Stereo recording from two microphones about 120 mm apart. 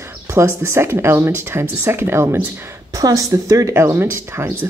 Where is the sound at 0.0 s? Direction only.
20° right (ahead or behind).